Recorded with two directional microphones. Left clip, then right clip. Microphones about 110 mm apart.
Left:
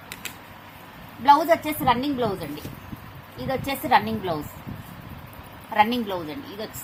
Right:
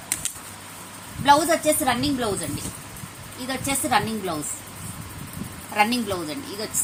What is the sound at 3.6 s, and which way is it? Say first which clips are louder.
Speech: left 2 dB; 90° left.